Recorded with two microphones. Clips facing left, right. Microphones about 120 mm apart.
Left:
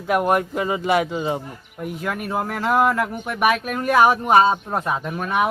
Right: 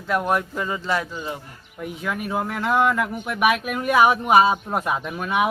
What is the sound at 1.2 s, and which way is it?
Speech, 25° left (ahead or behind).